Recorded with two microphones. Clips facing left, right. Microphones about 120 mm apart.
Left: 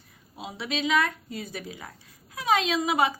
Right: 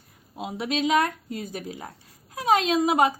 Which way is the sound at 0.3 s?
45° right (ahead or behind).